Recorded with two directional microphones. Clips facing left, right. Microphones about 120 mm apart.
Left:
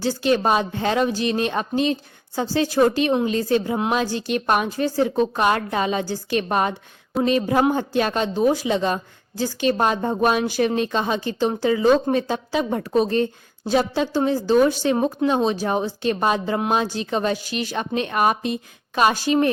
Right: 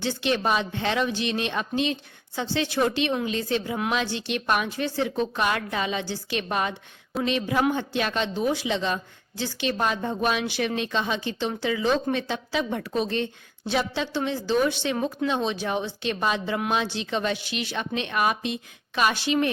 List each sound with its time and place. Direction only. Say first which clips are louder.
0.0 s speech: left 5 dB; 40° left (ahead or behind)